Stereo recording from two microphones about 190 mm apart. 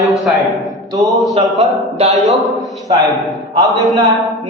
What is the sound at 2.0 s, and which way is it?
Speech, 35° right (ahead or behind).